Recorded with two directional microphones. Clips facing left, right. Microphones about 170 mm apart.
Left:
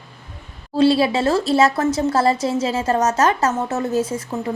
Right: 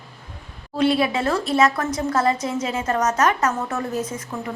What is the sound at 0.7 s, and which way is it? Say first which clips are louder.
A woman's voice: left 4 dB; 30° left (ahead or behind).